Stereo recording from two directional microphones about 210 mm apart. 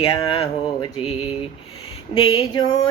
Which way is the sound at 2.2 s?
20° left (ahead or behind).